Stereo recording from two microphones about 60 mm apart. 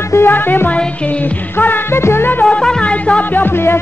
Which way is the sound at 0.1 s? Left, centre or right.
Left.